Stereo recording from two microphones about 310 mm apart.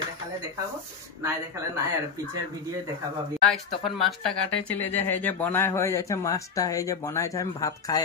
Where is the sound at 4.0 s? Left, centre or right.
Centre.